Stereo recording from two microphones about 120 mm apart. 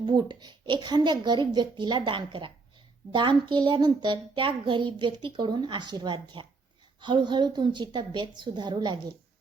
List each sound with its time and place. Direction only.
0.0 s a child's voice: 40° right (ahead or behind)